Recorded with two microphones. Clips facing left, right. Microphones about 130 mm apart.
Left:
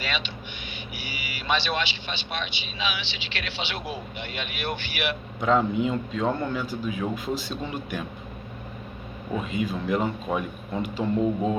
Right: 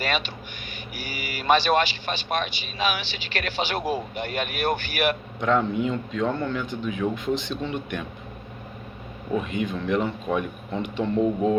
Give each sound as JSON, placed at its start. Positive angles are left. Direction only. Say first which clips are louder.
{"t": 0.0, "sound": "a man's voice", "louder": "right 4 dB", "side_deg": -45}
{"t": 5.4, "sound": "a man's voice", "louder": "left 1 dB", "side_deg": 5}
{"t": 9.5, "sound": "a man's voice", "louder": "right 1 dB", "side_deg": 5}